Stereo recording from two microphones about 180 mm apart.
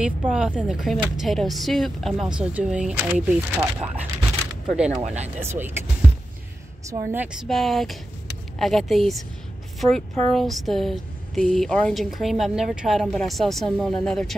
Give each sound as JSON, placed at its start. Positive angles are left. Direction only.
{"t": 0.0, "sound": "speech", "side_deg": -5}
{"t": 5.0, "sound": "speech", "side_deg": -40}
{"t": 5.4, "sound": "speech", "side_deg": -15}
{"t": 6.9, "sound": "speech", "side_deg": -10}
{"t": 7.4, "sound": "speech", "side_deg": 0}